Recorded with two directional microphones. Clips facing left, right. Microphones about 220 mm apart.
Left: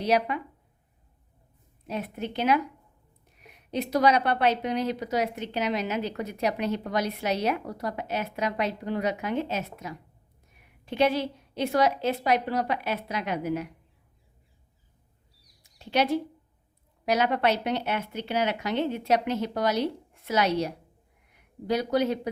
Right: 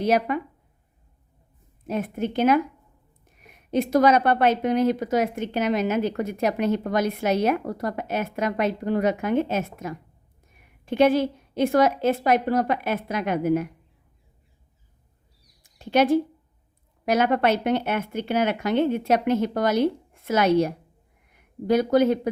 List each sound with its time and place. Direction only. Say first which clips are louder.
0.0 s a woman's voice: right 3 dB; 50° right (ahead or behind)
1.9 s a woman's voice: right 6 dB; 50° right (ahead or behind)
15.6 s a woman's voice: right 6 dB; 50° right (ahead or behind)